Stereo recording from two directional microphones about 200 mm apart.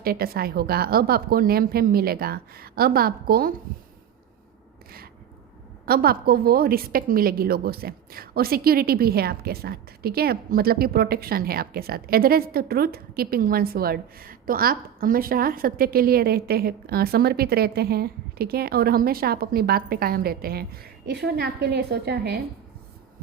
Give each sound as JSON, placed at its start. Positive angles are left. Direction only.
{"t": 0.0, "sound": "a woman's voice", "side_deg": -50}
{"t": 5.8, "sound": "a woman's voice", "side_deg": -50}